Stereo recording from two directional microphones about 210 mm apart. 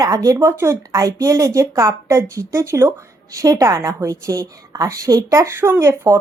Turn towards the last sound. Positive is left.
turn(degrees=-15)  # may be behind; listen again after turning